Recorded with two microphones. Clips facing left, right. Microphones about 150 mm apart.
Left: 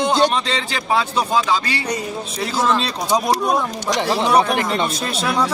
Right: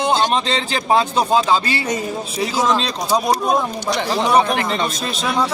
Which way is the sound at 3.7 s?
90° left.